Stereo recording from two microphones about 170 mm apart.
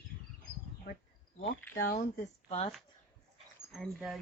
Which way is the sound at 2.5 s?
30° left (ahead or behind).